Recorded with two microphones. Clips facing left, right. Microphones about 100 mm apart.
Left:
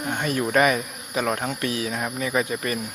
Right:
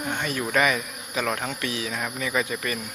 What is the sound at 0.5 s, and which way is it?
Insect, 35° left (ahead or behind).